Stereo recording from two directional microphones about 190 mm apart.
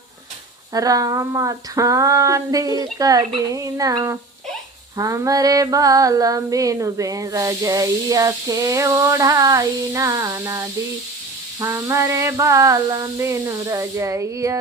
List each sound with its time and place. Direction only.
0.7 s female singing: 20° right (ahead or behind)